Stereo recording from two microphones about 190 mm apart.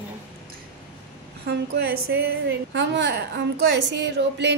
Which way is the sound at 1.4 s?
55° right (ahead or behind).